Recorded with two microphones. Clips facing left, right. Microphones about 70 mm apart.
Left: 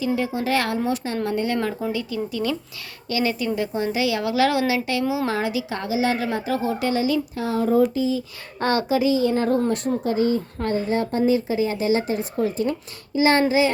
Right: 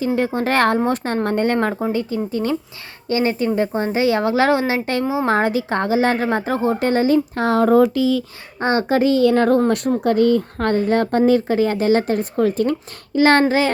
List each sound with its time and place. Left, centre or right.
0.0 s a woman's voice: right
7.4 s speech: right
8.5 s a child's voice: right
8.9 s speech: right
9.6 s speech: right